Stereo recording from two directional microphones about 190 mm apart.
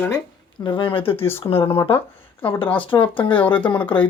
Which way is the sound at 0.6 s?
25° left (ahead or behind).